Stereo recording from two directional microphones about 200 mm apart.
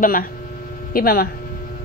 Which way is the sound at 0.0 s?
45° left (ahead or behind).